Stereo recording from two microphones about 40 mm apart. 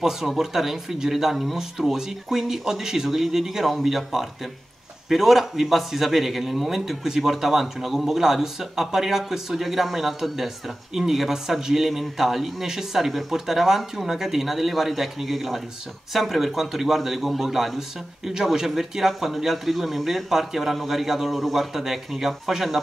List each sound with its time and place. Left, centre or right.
0.3 s a man's voice: centre